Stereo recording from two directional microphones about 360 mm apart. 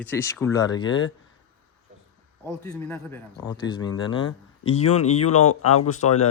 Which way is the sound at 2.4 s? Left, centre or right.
Centre.